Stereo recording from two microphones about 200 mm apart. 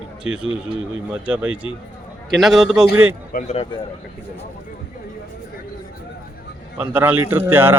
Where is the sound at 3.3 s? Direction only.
45° left (ahead or behind).